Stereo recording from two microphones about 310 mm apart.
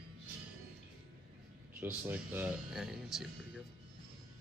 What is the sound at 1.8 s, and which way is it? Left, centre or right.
Speech, centre.